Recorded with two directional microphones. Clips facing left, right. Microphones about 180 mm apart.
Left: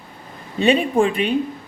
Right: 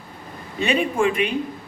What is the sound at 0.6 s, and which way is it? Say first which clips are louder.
Speech: left 4 dB; 35° left (ahead or behind).